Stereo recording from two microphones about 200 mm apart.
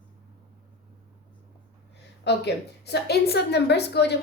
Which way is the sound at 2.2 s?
55° left (ahead or behind).